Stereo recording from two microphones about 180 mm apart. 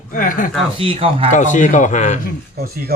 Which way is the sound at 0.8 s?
30° right (ahead or behind).